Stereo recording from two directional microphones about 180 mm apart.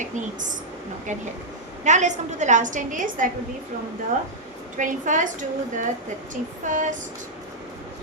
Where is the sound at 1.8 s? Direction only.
40° right (ahead or behind).